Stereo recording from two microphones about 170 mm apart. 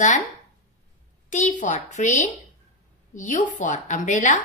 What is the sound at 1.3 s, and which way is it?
A woman's voice, 45° left (ahead or behind).